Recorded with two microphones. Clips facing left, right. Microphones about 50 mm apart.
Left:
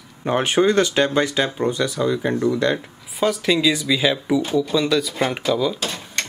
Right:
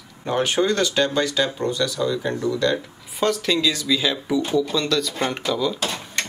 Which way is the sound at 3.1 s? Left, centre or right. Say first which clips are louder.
Left 2 dB; centre.